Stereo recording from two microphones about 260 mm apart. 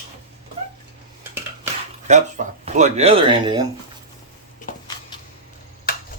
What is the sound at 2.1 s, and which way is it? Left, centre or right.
Speech, right.